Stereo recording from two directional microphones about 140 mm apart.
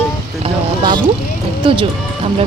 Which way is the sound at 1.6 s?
40° right (ahead or behind).